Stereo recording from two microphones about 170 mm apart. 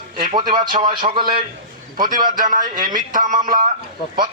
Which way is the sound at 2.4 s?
50° right (ahead or behind).